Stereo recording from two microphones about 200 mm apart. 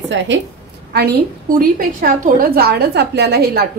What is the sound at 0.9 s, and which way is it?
A woman's voice, 50° right (ahead or behind).